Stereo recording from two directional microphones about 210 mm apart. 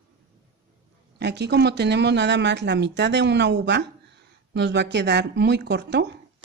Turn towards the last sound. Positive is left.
turn(degrees=-55)  # may be behind; listen again after turning